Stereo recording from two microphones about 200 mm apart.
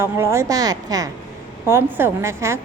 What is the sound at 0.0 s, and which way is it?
A woman's voice, 15° right (ahead or behind).